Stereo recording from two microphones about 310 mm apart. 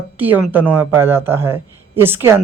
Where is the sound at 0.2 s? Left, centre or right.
Centre.